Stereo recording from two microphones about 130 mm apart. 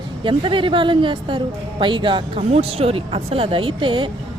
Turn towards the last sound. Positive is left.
turn(degrees=-40)  # may be behind; listen again after turning